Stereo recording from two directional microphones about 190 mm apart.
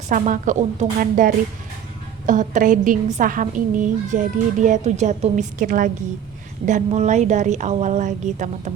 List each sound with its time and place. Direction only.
0.1 s a woman's voice: 40° right (ahead or behind)